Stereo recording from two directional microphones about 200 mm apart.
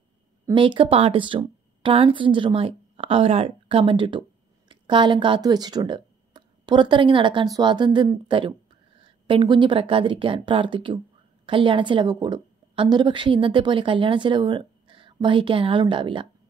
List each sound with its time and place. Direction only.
0.5 s a woman's voice: 25° right (ahead or behind)